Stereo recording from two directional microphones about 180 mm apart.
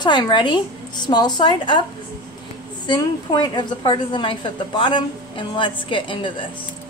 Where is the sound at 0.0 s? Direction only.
25° left (ahead or behind).